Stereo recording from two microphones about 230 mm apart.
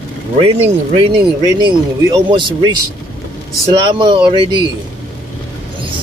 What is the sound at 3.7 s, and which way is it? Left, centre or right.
Speech, right.